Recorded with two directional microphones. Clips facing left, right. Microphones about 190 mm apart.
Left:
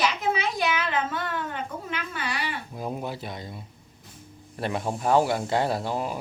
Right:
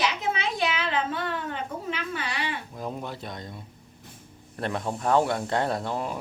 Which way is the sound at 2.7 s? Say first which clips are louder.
Left 2 dB; 10° left (ahead or behind).